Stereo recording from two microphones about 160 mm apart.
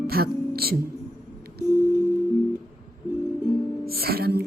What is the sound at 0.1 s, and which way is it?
Speech, 75° right (ahead or behind).